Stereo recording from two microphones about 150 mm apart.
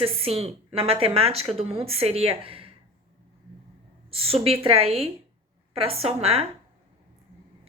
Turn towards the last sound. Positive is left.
turn(degrees=-40)  # may be behind; listen again after turning